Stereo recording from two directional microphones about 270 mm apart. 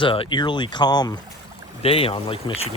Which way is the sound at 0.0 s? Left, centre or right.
Centre.